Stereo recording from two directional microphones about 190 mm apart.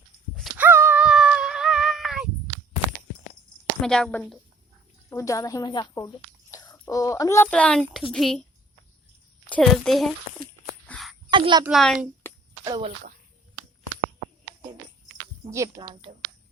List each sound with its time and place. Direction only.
0.5 s a sound: 10° right (ahead or behind)
3.8 s a woman's voice: 5° left (ahead or behind)
5.0 s a woman's voice: 15° left (ahead or behind)
9.5 s a woman's voice: 5° left (ahead or behind)
10.8 s a sound: 5° left (ahead or behind)
11.3 s a child's voice: 25° right (ahead or behind)
11.6 s a woman's voice: centre (ahead or behind)
12.2 s a sound: 10° left (ahead or behind)
12.6 s speech: 20° right (ahead or behind)
15.4 s speech: 15° right (ahead or behind)